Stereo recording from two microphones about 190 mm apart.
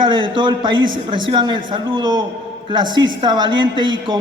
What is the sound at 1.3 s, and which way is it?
Speech, 25° right (ahead or behind).